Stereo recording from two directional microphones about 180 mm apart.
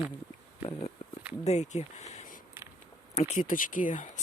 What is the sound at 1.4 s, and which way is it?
Speech, 40° left (ahead or behind).